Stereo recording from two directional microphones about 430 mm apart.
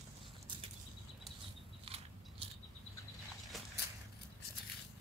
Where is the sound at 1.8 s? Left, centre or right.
Centre.